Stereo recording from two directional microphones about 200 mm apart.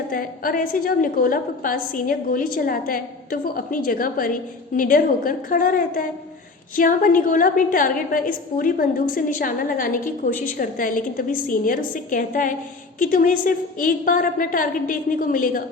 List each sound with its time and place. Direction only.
0.1 s a woman's voice: 45° left (ahead or behind)